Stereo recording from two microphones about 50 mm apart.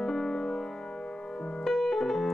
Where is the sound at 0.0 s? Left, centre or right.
Centre.